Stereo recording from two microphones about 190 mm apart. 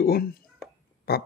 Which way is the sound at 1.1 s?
55° left (ahead or behind).